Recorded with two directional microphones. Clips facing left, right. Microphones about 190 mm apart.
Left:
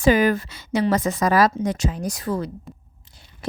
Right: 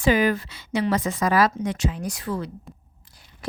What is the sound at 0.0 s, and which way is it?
Speech, 45° left (ahead or behind).